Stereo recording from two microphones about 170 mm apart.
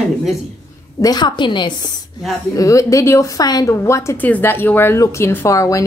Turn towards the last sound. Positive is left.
turn(degrees=20)  # may be behind; listen again after turning